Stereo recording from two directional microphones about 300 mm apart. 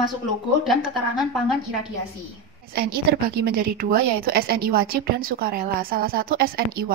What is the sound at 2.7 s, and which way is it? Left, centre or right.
A woman's voice, right.